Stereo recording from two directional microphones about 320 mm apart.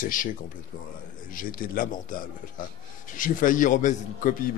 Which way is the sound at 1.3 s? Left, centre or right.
Left.